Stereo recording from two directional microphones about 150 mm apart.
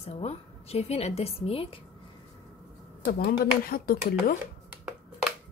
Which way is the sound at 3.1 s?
85° left.